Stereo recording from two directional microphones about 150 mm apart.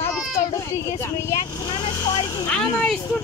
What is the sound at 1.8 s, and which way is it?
Vehicle, 30° left (ahead or behind).